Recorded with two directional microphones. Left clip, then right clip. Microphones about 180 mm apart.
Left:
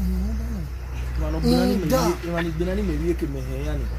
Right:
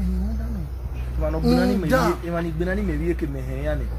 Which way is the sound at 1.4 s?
5° right (ahead or behind).